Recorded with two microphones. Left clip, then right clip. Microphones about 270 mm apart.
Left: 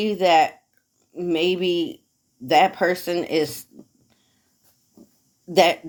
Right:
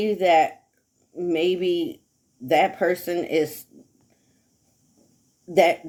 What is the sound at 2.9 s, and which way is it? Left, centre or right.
Speech, centre.